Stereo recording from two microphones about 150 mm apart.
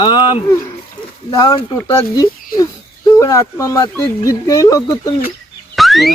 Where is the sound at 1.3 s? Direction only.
25° left (ahead or behind).